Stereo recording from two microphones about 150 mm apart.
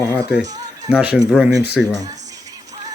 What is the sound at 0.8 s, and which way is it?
Speech, 5° right (ahead or behind).